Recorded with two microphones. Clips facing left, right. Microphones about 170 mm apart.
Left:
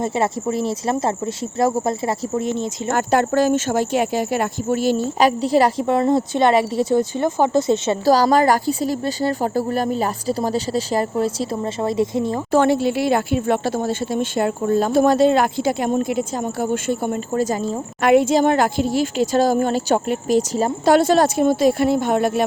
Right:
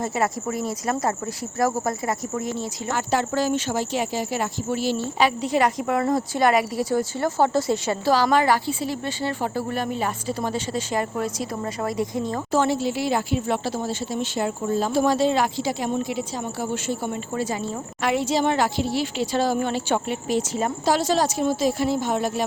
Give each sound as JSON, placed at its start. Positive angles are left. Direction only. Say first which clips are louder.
{"t": 0.0, "sound": "speech", "louder": "left 4 dB", "side_deg": 25}
{"t": 2.9, "sound": "speech", "louder": "left 6 dB", "side_deg": 50}
{"t": 5.4, "sound": "speech", "louder": "left 5 dB", "side_deg": 35}
{"t": 8.0, "sound": "speech", "louder": "left 4 dB", "side_deg": 40}
{"t": 12.5, "sound": "speech", "louder": "left 6 dB", "side_deg": 60}
{"t": 20.8, "sound": "a woman's voice", "louder": "left 7 dB", "side_deg": 55}